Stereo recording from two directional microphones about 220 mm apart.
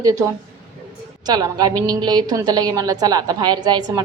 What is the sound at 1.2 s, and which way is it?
A woman's voice, 20° right (ahead or behind).